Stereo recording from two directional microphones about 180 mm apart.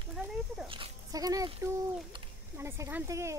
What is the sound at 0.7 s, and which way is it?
Speech, 25° right (ahead or behind).